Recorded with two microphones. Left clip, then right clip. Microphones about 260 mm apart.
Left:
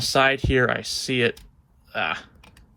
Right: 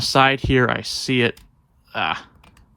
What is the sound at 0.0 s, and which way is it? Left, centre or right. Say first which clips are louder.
Speech: right 3 dB; centre.